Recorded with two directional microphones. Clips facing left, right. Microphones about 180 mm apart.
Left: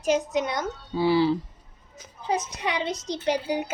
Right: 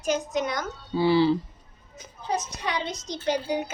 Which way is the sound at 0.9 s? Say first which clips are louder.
Right 1 dB; 10° left (ahead or behind).